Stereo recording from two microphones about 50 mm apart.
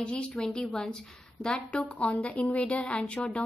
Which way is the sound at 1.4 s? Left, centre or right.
Centre.